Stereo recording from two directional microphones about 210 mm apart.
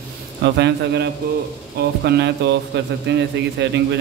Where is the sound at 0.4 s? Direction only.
55° right (ahead or behind).